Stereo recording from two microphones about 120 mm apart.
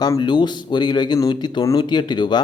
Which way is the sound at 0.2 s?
40° left (ahead or behind).